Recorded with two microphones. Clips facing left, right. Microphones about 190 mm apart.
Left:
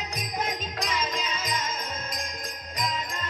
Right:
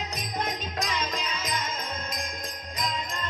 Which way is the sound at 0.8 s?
Centre (ahead or behind).